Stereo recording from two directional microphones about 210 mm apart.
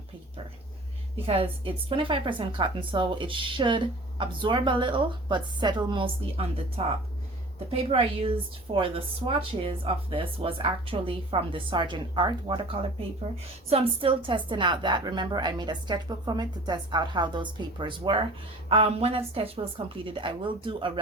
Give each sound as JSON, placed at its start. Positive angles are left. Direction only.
{"t": 1.1, "sound": "a woman's voice", "side_deg": -25}